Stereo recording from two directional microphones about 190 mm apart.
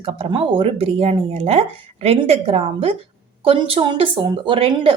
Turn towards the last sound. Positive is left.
turn(degrees=-25)  # may be behind; listen again after turning